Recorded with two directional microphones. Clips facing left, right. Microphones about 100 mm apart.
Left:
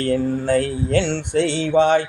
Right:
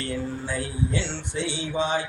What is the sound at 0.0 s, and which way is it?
Mantra, 55° left (ahead or behind).